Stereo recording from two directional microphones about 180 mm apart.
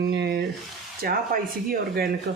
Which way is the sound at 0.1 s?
65° right (ahead or behind).